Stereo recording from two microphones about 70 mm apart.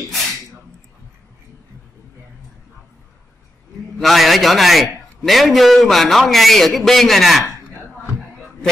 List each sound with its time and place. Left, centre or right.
4.0 s a man's voice: centre